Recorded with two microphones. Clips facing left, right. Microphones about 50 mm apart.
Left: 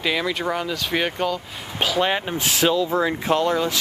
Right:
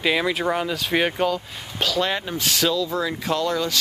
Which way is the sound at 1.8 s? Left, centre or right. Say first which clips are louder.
Left 2 dB; centre.